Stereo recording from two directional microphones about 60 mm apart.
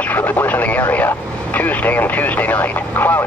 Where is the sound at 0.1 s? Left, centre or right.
Left.